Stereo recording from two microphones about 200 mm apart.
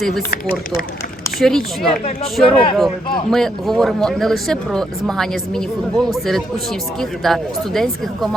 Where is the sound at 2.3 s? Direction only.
Centre (ahead or behind).